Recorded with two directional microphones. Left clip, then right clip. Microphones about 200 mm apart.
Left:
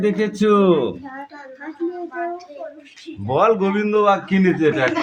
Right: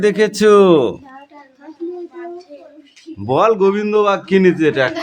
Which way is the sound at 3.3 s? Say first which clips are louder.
Right 4 dB; 35° right (ahead or behind).